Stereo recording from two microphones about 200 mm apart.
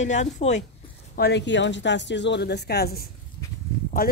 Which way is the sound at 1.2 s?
60° left (ahead or behind).